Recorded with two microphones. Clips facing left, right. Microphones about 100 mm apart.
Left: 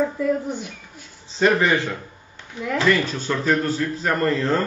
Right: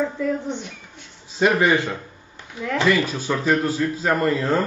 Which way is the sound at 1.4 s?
15° right (ahead or behind).